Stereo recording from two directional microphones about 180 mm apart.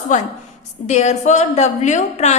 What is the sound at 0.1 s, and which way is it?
A woman's voice, 40° left (ahead or behind).